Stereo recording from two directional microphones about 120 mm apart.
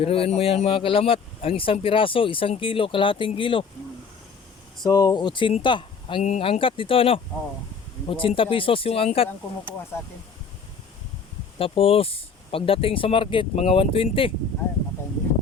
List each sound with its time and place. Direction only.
0.0 s speech: 55° left (ahead or behind)
4.8 s speech: 30° left (ahead or behind)
6.2 s speech: 60° left (ahead or behind)
11.5 s speech: 50° left (ahead or behind)